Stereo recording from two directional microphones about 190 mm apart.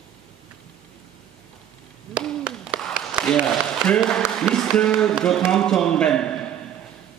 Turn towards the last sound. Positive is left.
turn(degrees=5)  # may be behind; listen again after turning